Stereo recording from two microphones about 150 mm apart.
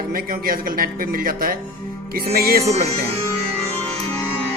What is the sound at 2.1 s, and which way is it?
Speech, 85° right.